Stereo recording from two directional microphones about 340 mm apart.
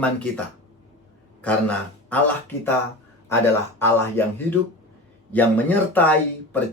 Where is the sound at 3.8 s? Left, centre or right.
Centre.